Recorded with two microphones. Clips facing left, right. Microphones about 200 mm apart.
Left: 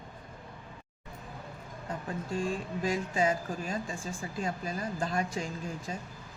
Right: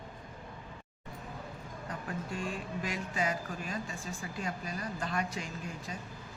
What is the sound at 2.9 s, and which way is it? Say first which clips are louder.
Speech: left 6 dB; 30° left (ahead or behind).